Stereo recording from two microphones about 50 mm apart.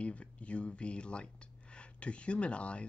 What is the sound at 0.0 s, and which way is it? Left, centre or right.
Speech, left.